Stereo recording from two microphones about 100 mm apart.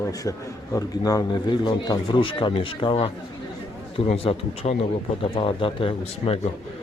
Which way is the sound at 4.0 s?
70° left (ahead or behind).